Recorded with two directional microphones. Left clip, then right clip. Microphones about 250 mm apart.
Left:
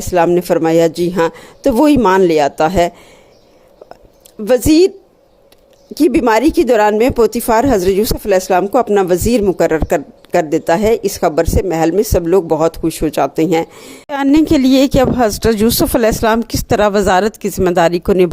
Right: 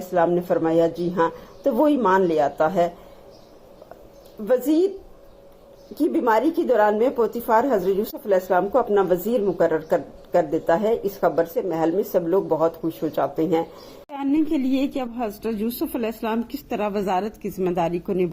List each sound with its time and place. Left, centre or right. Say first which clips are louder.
0.1 s speech: left 8 dB; left
4.4 s speech: left 10 dB; left
6.1 s speech: left 8 dB; left